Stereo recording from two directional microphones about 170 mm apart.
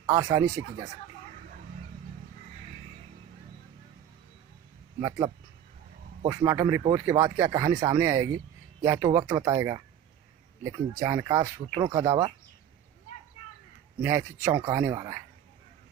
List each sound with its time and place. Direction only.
0.0 s speech: 20° right (ahead or behind)
5.0 s speech: 20° right (ahead or behind)
14.0 s speech: 15° right (ahead or behind)